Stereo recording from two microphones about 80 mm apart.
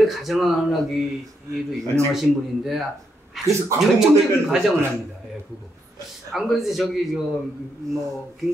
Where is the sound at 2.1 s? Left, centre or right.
Centre.